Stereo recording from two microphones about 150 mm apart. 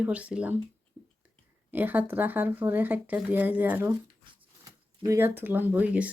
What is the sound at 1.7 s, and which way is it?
Speech, 10° right (ahead or behind).